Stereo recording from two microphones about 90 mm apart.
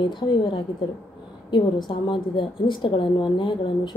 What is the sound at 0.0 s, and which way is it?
A woman's voice, 60° left (ahead or behind).